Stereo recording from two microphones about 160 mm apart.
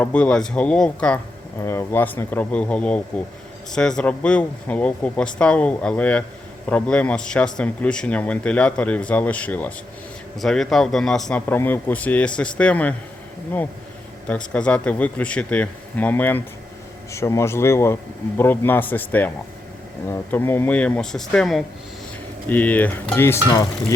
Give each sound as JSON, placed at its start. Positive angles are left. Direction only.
{"t": 0.0, "sound": "speech", "side_deg": 5}
{"t": 14.3, "sound": "speech", "side_deg": 5}